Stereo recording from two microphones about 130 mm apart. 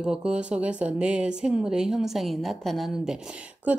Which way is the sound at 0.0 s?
5° right (ahead or behind).